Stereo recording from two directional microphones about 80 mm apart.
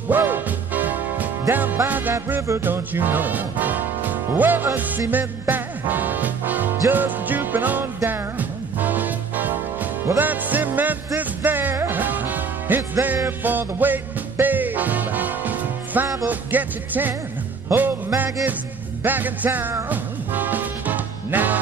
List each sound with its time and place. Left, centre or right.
0.1 s music: right